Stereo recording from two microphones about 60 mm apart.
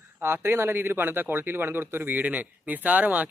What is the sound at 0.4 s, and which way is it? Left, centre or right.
Speech, right.